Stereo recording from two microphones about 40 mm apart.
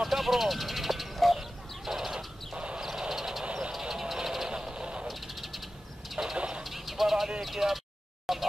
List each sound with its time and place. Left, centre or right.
0.0 s a sound: centre
1.9 s chicken: centre
2.1 s a sound: right
2.8 s vehicle: centre
3.9 s bird: centre
4.5 s vehicle: centre
5.0 s bird: centre
6.3 s vehicle: right
6.6 s vehicle: centre
7.4 s a sound: centre